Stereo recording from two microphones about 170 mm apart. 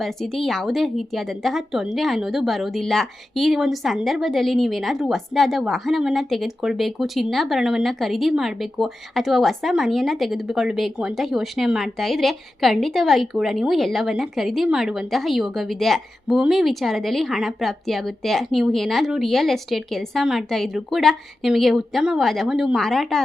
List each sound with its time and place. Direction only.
0.0 s speech: centre (ahead or behind)